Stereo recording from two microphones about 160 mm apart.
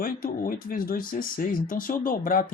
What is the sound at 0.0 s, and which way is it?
Speech, 60° left (ahead or behind).